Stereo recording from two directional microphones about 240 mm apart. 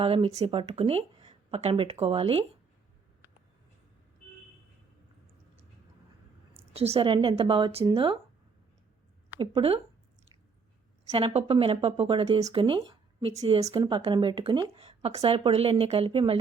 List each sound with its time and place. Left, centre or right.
0.0 s speech: right
6.7 s speech: right
9.4 s speech: right
11.1 s speech: right